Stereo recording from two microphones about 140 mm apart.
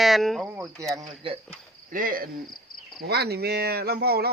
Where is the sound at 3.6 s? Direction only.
90° right.